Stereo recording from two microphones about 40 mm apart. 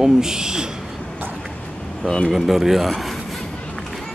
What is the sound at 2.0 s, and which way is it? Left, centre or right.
Speech, centre.